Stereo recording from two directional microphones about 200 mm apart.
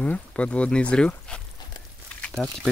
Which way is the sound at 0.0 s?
5° left (ahead or behind).